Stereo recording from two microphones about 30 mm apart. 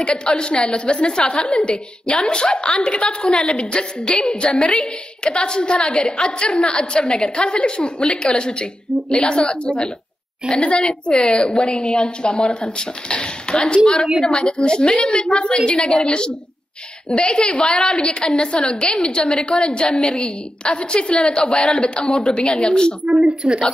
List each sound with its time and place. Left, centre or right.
0.0 s a woman's voice: left
4.7 s a woman's voice: left
6.0 s a woman's voice: left
8.9 s a sound: left
9.2 s a woman's voice: left
23.2 s a woman's voice: right